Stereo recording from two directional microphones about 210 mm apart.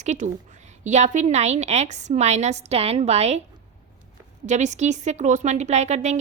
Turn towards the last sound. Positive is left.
turn(degrees=-30)  # may be behind; listen again after turning